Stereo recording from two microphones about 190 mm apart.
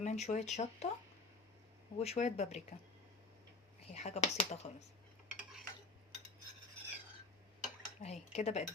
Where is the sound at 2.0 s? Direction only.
35° left (ahead or behind).